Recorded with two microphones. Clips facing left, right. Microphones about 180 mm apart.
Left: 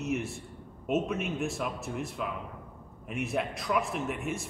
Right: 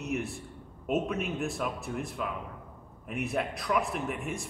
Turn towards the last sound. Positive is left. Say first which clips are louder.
# left 1 dB
turn(degrees=0)  # may be behind; listen again after turning